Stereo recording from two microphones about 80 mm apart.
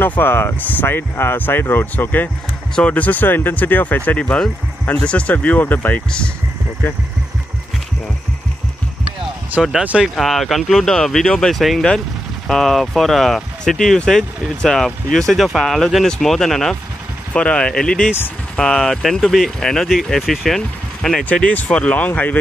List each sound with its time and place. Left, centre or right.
0.0 s speech: left
9.6 s speech: centre
10.1 s speech: centre
21.3 s speech: centre